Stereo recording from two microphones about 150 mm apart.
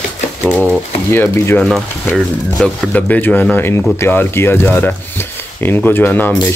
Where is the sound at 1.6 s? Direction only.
Centre (ahead or behind).